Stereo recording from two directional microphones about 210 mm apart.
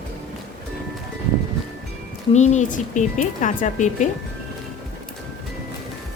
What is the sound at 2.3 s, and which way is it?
Speech, 35° left (ahead or behind).